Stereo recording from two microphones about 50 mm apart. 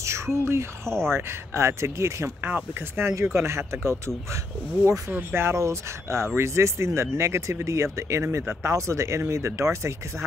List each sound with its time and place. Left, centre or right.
0.0 s speech: right
2.4 s speech: right
5.3 s speech: right
5.6 s speech: right